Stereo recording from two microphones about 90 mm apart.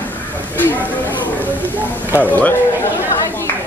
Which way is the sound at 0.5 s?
20° left (ahead or behind).